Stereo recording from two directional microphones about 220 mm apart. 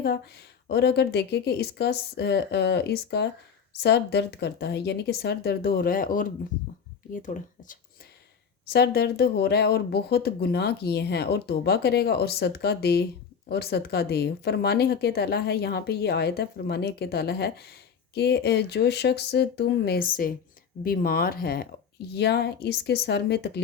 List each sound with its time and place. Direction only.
0.7 s speech: 50° left (ahead or behind)
8.7 s speech: 45° left (ahead or behind)